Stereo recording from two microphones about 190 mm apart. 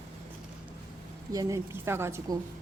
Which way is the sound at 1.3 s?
15° right (ahead or behind).